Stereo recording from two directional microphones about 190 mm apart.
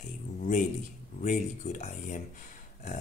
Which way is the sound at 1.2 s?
40° left (ahead or behind).